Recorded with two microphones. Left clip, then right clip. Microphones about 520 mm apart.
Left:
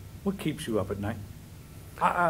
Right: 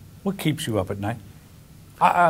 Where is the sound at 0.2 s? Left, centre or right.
Right.